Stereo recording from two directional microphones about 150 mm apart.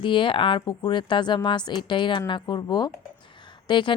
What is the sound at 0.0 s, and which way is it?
A woman's voice, 35° left (ahead or behind).